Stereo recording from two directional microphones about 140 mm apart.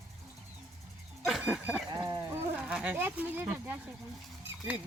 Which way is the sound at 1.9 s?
25° right (ahead or behind).